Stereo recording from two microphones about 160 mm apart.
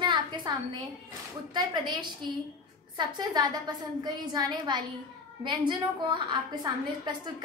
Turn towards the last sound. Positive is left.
turn(degrees=-30)  # may be behind; listen again after turning